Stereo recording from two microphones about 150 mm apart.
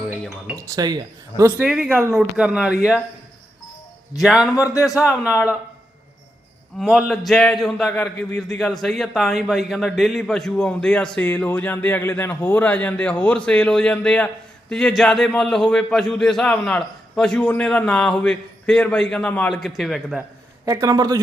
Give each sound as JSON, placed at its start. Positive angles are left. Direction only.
{"t": 0.1, "sound": "chink", "side_deg": -5}
{"t": 0.5, "sound": "speech", "side_deg": -20}
{"t": 1.5, "sound": "a man's voice", "side_deg": -5}
{"t": 4.2, "sound": "a man's voice", "side_deg": 0}
{"t": 4.5, "sound": "speech", "side_deg": 20}
{"t": 4.9, "sound": "speech", "side_deg": -5}
{"t": 6.7, "sound": "a man's voice", "side_deg": 0}
{"t": 20.7, "sound": "speech", "side_deg": -25}